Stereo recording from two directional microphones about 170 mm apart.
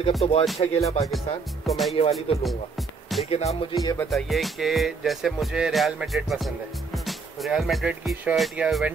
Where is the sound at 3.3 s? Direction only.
40° left (ahead or behind).